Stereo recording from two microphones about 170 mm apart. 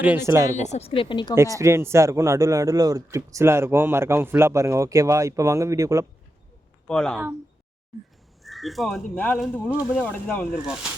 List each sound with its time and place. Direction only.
0.0 s speech: 10° right (ahead or behind)
0.5 s a woman's voice: 40° left (ahead or behind); by 1.4 s 25° left (ahead or behind)
1.5 s speech: 15° right (ahead or behind)
6.8 s speech: 5° left (ahead or behind)
8.4 s speech: centre (ahead or behind)
10.0 s speech: 10° left (ahead or behind)